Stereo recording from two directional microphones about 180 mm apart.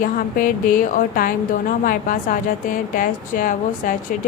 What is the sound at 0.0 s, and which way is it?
A woman's voice, 50° left (ahead or behind).